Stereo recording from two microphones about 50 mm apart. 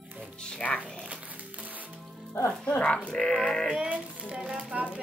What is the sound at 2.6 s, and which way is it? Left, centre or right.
Speech, left.